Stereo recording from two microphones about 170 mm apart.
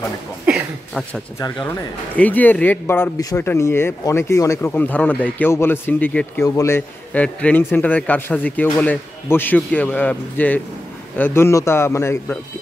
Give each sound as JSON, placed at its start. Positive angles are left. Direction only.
{"t": 0.5, "sound": "a sound", "side_deg": -5}
{"t": 1.4, "sound": "speech", "side_deg": 25}
{"t": 2.1, "sound": "speech", "side_deg": 10}